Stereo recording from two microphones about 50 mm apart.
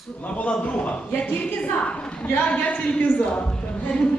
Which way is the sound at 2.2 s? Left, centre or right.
Left.